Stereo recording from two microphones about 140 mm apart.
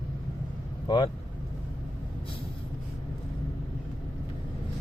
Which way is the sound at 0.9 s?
30° left (ahead or behind).